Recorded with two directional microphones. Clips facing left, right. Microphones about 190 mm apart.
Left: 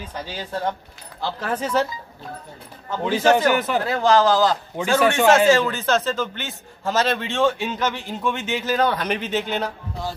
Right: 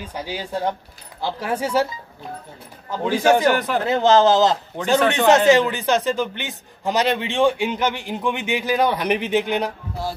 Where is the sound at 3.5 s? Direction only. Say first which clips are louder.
Right 1 dB; centre (ahead or behind).